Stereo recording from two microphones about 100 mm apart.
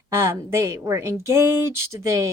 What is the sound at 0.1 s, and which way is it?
Speech, 25° right (ahead or behind).